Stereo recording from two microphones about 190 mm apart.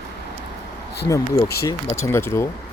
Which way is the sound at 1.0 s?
15° left (ahead or behind).